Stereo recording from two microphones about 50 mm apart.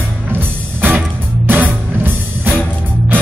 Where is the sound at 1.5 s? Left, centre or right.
Right.